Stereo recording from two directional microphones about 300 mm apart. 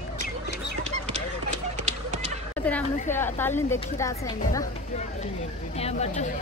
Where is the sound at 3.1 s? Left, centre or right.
Centre.